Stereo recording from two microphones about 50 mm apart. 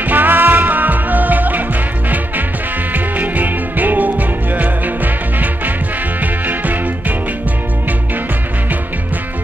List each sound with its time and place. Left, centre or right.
0.0 s music: right
2.9 s music: right